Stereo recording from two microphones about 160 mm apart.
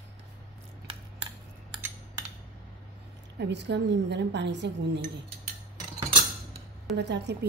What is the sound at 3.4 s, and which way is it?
A woman's voice, 90° right.